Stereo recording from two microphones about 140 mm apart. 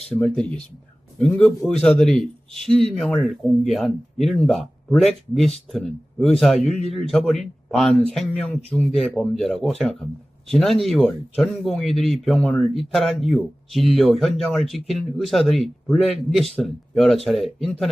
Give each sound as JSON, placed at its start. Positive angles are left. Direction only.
{"t": 0.1, "sound": "speech", "side_deg": 5}